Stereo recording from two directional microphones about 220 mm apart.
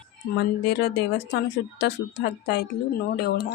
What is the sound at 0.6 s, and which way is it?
Speech, 50° left (ahead or behind).